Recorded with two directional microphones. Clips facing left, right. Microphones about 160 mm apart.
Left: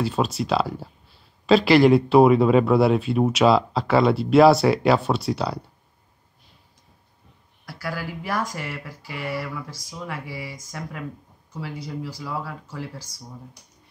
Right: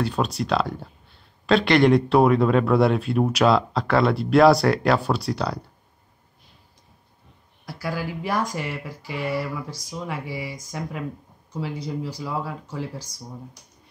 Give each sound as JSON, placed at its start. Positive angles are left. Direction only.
{"t": 0.0, "sound": "speech", "side_deg": 0}
{"t": 7.6, "sound": "speech", "side_deg": -15}